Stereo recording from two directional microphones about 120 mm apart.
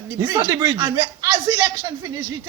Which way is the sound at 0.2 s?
35° right (ahead or behind).